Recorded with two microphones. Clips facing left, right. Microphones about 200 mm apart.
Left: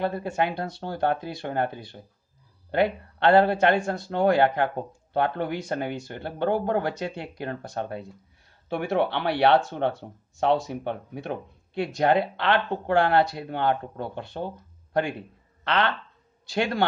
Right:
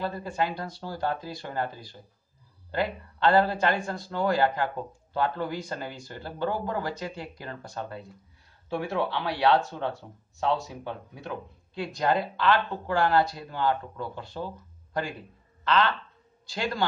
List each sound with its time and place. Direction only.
0.0 s speech: 65° left (ahead or behind)